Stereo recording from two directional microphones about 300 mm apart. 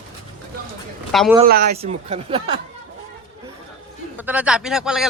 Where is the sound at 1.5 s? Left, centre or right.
Right.